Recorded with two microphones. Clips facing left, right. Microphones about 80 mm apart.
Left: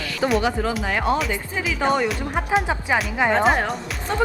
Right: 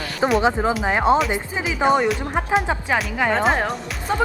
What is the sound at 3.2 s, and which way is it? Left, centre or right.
Speech, left.